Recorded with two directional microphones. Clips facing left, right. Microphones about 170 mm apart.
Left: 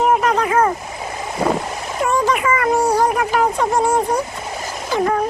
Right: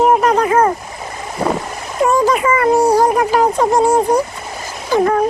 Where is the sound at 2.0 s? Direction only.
35° right (ahead or behind).